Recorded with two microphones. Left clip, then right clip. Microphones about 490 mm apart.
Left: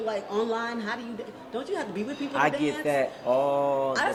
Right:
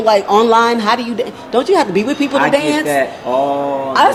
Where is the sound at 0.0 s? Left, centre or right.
Right.